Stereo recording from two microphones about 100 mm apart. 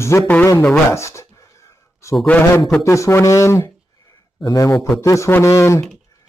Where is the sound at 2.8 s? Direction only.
30° left (ahead or behind).